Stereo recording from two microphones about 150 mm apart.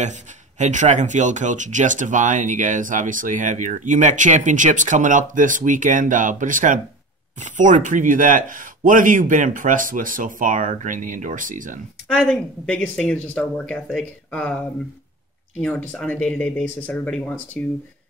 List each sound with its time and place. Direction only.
0.0 s speech: 55° right (ahead or behind)
12.1 s speech: 5° left (ahead or behind)
15.6 s speech: 10° left (ahead or behind)